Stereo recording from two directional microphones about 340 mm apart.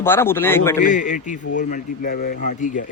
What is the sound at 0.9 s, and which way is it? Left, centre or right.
A man's voice, left.